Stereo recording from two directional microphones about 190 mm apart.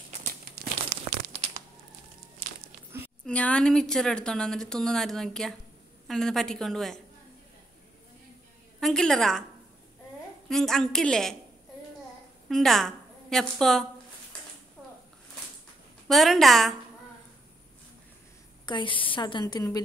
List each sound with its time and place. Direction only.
0.2 s crumpling: 55° right (ahead or behind)
1.3 s crunch: 30° right (ahead or behind)
2.9 s a sound: 15° right (ahead or behind)
3.3 s a woman's voice: 5° left (ahead or behind)
8.7 s a woman's voice: centre (ahead or behind)
10.5 s a woman's voice: centre (ahead or behind)
12.4 s a woman's voice: centre (ahead or behind)
16.1 s a woman's voice: centre (ahead or behind)
18.7 s a woman's voice: 25° left (ahead or behind)